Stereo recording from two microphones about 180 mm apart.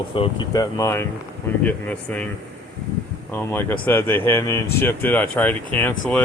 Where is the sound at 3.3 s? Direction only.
10° left (ahead or behind).